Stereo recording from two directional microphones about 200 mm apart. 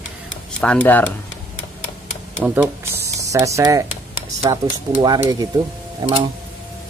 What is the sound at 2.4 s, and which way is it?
Speech, 5° right (ahead or behind).